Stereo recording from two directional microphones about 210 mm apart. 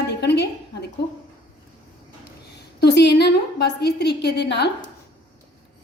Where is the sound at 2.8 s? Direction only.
55° left (ahead or behind).